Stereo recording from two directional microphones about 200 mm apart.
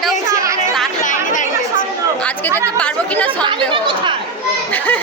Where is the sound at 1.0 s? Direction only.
40° left (ahead or behind).